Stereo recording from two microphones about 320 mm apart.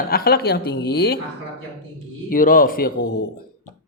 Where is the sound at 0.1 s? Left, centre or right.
Left.